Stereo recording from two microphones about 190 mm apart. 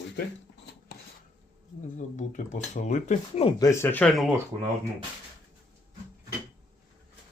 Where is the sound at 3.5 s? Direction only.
15° left (ahead or behind).